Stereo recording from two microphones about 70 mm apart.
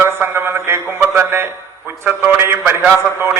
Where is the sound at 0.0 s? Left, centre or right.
Right.